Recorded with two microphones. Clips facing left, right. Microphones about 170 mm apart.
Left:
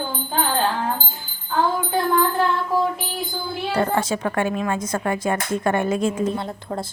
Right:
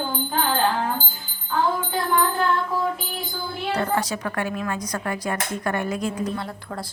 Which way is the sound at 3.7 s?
25° left (ahead or behind).